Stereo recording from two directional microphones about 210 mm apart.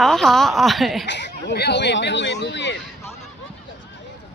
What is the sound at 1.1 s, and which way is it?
Speech, 55° left (ahead or behind).